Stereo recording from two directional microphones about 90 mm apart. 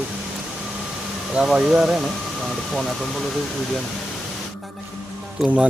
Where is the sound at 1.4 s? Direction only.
5° right (ahead or behind).